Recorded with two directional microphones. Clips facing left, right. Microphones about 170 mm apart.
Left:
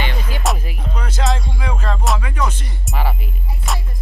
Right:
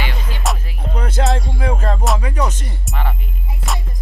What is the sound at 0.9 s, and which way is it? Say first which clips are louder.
Music: right 3 dB; 55° right (ahead or behind).